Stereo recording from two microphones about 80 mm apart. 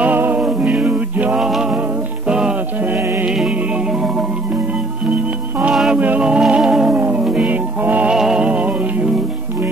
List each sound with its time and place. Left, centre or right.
0.0 s music: right
0.4 s music: centre
1.4 s music: centre
5.9 s music: centre
7.0 s music: centre
8.1 s music: centre